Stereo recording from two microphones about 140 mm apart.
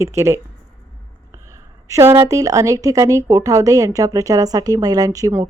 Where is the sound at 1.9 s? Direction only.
20° right (ahead or behind).